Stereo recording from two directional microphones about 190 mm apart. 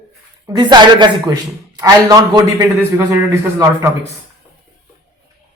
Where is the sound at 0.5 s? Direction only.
25° right (ahead or behind).